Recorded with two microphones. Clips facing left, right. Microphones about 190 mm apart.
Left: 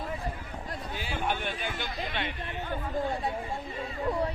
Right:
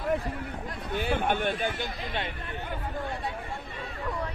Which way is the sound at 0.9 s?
55° right (ahead or behind).